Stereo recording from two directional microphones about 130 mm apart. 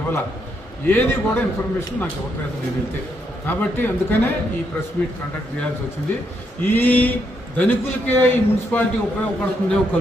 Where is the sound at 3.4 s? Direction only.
15° left (ahead or behind).